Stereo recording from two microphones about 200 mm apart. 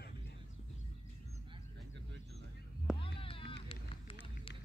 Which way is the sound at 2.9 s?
25° left (ahead or behind).